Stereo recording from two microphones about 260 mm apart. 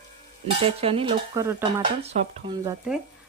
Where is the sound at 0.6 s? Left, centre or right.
Right.